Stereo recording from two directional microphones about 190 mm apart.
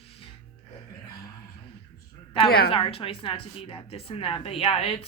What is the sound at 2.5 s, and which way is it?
Speech, 55° left (ahead or behind).